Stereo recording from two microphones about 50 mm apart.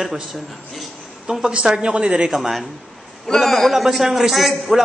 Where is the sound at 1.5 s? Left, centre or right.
Centre.